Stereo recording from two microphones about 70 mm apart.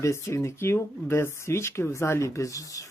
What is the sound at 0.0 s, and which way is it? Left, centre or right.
Speech, left.